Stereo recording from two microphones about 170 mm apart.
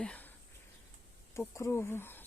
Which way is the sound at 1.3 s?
15° left (ahead or behind).